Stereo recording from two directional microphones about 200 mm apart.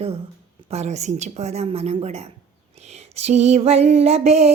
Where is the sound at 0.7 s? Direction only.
35° right (ahead or behind).